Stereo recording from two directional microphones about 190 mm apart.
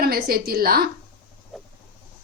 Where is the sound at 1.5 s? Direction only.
Centre (ahead or behind).